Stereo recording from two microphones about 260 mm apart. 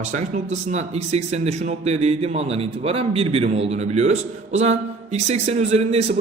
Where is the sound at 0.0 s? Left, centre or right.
Right.